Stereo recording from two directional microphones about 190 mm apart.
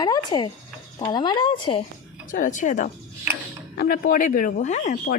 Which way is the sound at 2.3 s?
40° left (ahead or behind).